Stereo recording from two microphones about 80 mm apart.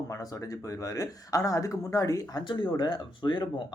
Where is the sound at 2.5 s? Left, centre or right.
Left.